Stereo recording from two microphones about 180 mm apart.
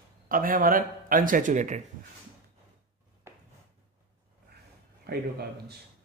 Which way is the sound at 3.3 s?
15° right (ahead or behind).